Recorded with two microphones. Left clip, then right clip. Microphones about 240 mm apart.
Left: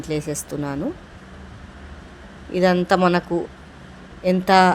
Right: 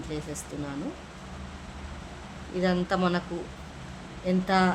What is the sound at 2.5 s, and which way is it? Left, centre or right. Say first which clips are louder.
Speech: left 10 dB; left.